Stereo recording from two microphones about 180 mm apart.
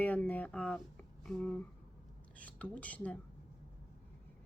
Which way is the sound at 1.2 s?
5° left (ahead or behind).